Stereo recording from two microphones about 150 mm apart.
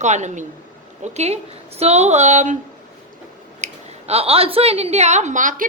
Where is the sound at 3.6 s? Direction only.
45° right (ahead or behind).